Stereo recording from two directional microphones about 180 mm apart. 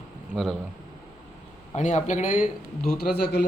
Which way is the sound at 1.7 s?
40° left (ahead or behind).